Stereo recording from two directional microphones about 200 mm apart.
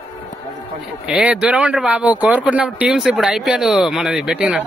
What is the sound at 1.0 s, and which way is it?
Speech, 5° right (ahead or behind).